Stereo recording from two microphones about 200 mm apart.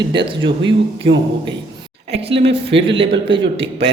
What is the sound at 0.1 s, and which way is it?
Speech, 25° right (ahead or behind).